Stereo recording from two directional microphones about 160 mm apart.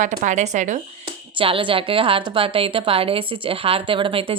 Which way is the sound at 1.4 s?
35° right (ahead or behind).